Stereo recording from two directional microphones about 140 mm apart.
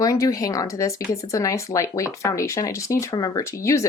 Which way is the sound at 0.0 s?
25° left (ahead or behind).